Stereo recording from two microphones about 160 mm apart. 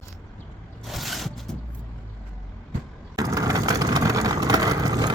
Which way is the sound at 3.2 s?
20° right (ahead or behind).